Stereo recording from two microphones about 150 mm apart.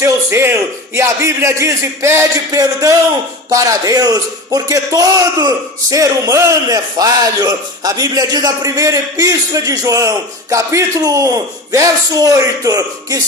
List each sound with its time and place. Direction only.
0.0 s a man's voice: 20° right (ahead or behind)